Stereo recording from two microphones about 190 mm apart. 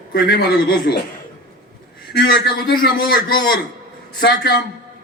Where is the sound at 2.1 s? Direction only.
60° left (ahead or behind).